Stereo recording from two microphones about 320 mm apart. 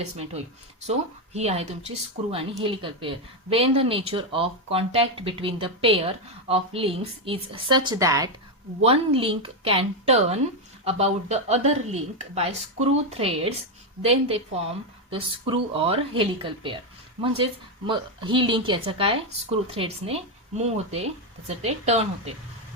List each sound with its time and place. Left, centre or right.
0.9 s a woman's voice: centre